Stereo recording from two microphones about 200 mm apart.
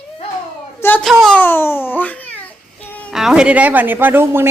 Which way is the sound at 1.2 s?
5° left (ahead or behind).